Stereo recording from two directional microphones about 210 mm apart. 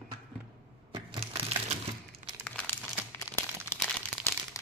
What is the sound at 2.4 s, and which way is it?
Crumpling, 5° left (ahead or behind).